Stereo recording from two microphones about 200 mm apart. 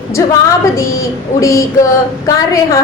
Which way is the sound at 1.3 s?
15° left (ahead or behind).